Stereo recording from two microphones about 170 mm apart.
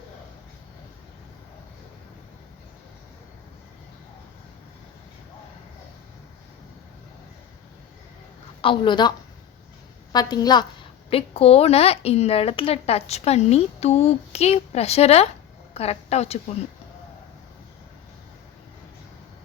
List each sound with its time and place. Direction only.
8.6 s a woman's voice: 30° left (ahead or behind)
11.1 s speech: 35° left (ahead or behind)